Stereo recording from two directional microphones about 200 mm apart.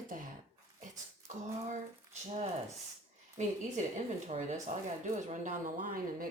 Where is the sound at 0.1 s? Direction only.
40° right (ahead or behind).